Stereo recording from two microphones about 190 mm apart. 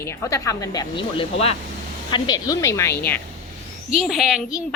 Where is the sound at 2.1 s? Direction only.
20° left (ahead or behind).